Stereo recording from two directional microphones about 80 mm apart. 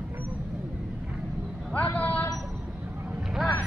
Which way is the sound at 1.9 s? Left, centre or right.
Centre.